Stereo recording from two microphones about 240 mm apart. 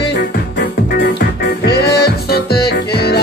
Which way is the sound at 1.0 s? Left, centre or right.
Left.